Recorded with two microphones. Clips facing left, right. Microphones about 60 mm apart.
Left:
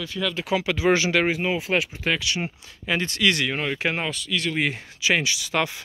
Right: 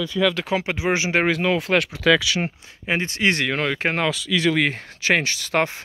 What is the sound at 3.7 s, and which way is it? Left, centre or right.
Speech, right.